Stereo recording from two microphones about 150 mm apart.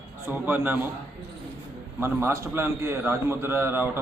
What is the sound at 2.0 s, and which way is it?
A man's voice, 15° right (ahead or behind).